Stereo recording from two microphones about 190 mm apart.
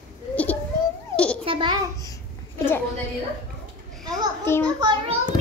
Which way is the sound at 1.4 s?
25° right (ahead or behind).